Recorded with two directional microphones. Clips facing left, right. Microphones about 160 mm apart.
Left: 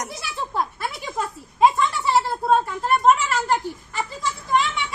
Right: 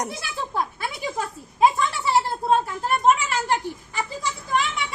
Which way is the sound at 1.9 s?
Centre (ahead or behind).